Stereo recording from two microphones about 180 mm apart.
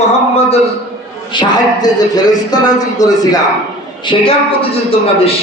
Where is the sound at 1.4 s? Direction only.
20° left (ahead or behind).